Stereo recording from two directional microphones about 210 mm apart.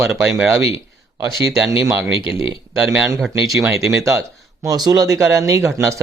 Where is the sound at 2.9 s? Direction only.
5° right (ahead or behind).